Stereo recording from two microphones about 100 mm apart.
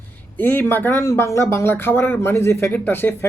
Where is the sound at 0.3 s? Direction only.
15° left (ahead or behind).